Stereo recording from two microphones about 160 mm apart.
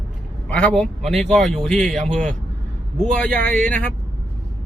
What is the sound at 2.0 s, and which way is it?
Speech, 50° right (ahead or behind).